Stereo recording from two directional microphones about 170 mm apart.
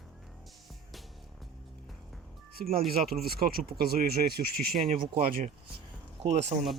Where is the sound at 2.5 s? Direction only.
60° right (ahead or behind).